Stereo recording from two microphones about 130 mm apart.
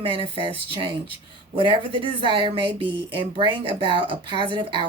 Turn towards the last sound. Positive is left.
turn(degrees=-40)  # may be behind; listen again after turning